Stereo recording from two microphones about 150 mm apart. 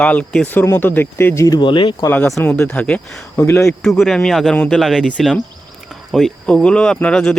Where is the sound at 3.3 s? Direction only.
15° left (ahead or behind).